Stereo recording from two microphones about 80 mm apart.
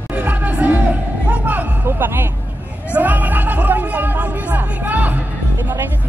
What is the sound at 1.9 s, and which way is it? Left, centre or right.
Speech, right.